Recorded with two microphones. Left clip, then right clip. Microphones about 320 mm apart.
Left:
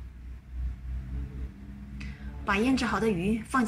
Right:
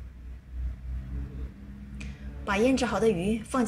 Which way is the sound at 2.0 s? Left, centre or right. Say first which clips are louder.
Right 1 dB; centre.